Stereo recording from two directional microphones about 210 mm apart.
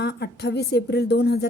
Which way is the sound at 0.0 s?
50° left (ahead or behind).